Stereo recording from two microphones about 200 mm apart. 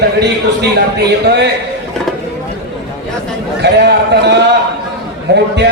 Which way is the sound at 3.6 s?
55° right (ahead or behind).